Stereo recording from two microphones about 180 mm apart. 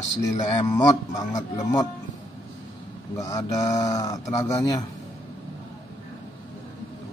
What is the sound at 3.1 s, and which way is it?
Speech, 20° left (ahead or behind).